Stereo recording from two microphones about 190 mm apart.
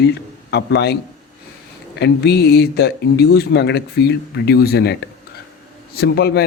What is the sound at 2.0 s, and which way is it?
Speech, 60° left (ahead or behind).